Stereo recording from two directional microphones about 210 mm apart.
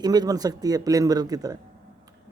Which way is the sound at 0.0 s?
20° right (ahead or behind).